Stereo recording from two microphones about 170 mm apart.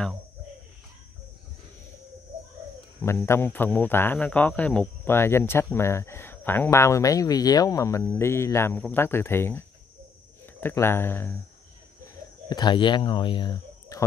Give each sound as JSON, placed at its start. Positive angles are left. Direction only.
{"t": 3.3, "sound": "speech", "side_deg": 15}
{"t": 12.4, "sound": "speech", "side_deg": 25}